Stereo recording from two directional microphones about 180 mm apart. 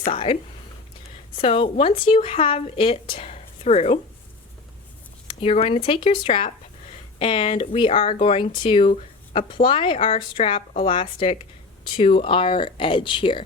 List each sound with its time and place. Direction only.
0.1 s speech: 30° left (ahead or behind)
1.4 s speech: 30° left (ahead or behind)
5.3 s speech: 30° left (ahead or behind)